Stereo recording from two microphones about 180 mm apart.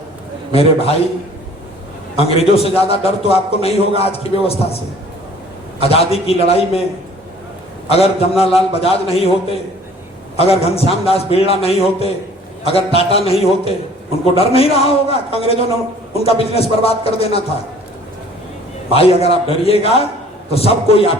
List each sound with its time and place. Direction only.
0.5 s a man's voice: 35° left (ahead or behind)
2.1 s a man's voice: 35° left (ahead or behind)
5.8 s a man's voice: 35° left (ahead or behind)
7.9 s a man's voice: 35° left (ahead or behind)
18.9 s a man's voice: 35° left (ahead or behind)